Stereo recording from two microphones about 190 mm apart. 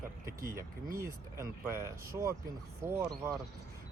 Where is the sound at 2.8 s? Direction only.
10° right (ahead or behind).